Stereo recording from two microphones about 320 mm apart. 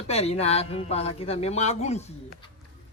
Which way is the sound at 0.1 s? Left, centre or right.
Centre.